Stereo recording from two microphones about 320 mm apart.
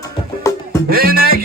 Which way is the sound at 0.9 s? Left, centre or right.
Right.